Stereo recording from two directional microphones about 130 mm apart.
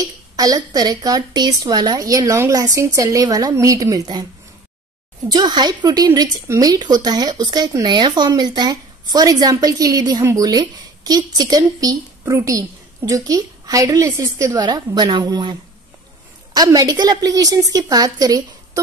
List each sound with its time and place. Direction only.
0.0 s a woman's voice: 30° right (ahead or behind)
5.3 s a woman's voice: 35° right (ahead or behind)
16.5 s a woman's voice: 30° right (ahead or behind)